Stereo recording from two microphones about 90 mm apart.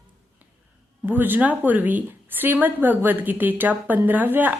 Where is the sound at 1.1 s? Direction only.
20° right (ahead or behind).